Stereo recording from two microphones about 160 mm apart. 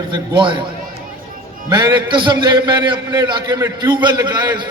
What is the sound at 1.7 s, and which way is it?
A man's voice, 30° right (ahead or behind).